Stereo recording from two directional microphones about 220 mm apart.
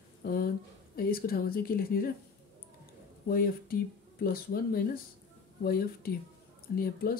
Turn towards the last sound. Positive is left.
turn(degrees=40)  # may be behind; listen again after turning